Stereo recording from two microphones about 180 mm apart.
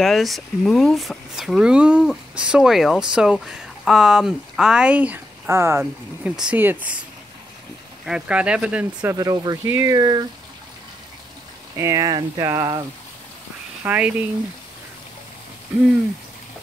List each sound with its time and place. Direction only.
0.0 s speech: centre (ahead or behind)
8.0 s speech: 5° right (ahead or behind)
9.1 s speech: 20° right (ahead or behind)
11.7 s speech: 15° right (ahead or behind)
13.8 s speech: 10° right (ahead or behind)